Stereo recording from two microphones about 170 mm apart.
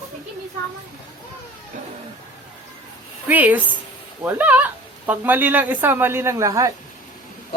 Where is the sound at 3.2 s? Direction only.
10° right (ahead or behind).